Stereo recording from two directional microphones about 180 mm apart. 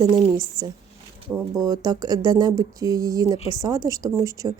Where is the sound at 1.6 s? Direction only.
20° right (ahead or behind).